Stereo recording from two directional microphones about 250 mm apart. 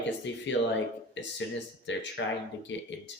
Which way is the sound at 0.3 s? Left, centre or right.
Left.